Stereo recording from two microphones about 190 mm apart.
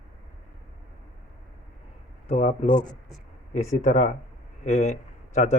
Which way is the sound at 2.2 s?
40° left (ahead or behind).